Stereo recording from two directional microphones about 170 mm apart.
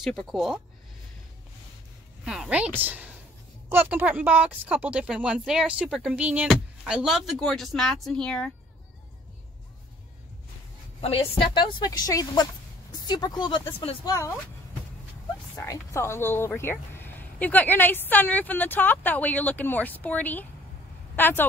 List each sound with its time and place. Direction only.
0.0 s speech: centre (ahead or behind)
2.2 s speech: 5° right (ahead or behind)
11.0 s speech: 35° left (ahead or behind)
15.5 s speech: 15° left (ahead or behind)